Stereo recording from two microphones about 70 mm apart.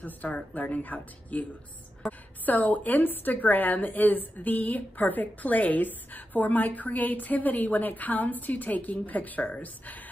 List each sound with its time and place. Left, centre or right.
0.0 s a woman's voice: left
2.4 s a woman's voice: left